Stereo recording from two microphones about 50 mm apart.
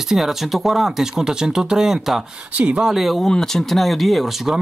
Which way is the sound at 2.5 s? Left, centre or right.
Right.